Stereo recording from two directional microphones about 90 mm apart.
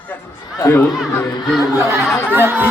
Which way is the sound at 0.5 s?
30° left (ahead or behind).